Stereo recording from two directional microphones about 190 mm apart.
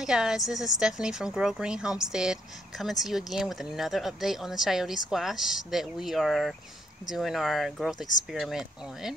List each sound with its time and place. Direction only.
0.0 s speech: 5° right (ahead or behind)